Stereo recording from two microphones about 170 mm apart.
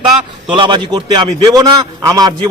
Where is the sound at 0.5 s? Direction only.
25° right (ahead or behind).